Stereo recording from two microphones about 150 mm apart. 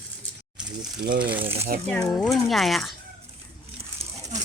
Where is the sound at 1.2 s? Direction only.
35° right (ahead or behind).